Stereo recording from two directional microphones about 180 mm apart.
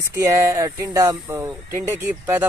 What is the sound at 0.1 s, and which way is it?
Speech, 15° right (ahead or behind).